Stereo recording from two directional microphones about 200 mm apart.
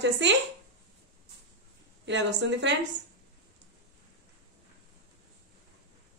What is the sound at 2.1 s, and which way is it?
Speech, 60° right (ahead or behind).